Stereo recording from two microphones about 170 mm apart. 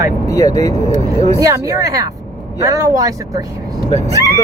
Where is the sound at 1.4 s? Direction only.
20° right (ahead or behind).